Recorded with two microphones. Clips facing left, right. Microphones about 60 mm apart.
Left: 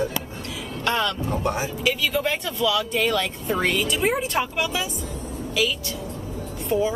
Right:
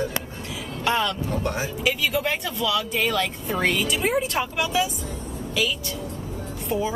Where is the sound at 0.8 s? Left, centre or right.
Centre.